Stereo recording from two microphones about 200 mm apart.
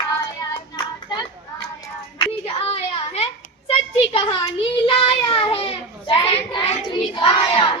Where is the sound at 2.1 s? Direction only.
30° left (ahead or behind).